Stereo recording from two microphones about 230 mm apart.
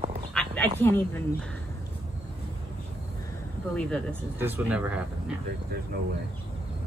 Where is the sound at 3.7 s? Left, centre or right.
Centre.